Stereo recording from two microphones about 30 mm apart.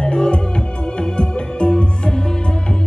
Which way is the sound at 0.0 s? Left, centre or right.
Left.